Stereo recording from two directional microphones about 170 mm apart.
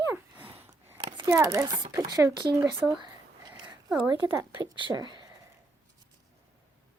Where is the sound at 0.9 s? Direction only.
30° right (ahead or behind).